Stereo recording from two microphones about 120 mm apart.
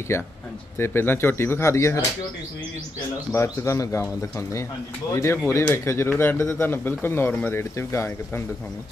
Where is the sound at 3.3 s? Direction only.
25° left (ahead or behind).